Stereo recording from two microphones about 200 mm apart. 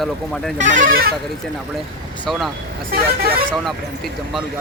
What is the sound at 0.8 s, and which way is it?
Speech, 45° right (ahead or behind).